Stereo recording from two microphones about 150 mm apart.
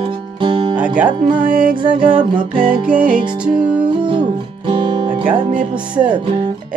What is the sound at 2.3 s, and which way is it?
Music, 70° right (ahead or behind).